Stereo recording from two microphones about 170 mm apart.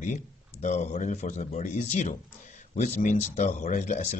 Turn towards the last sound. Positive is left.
turn(degrees=45)  # may be behind; listen again after turning